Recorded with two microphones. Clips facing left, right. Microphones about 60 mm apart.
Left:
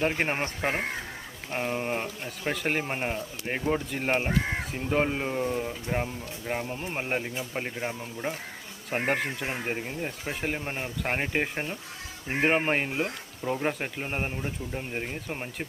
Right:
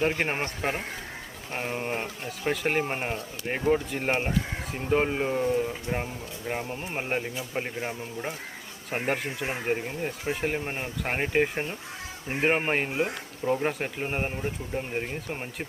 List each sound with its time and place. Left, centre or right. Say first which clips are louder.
0.0 s speech: right 1 dB; centre
0.4 s speech: left 1 dB; centre
1.7 s speech: left 1 dB; centre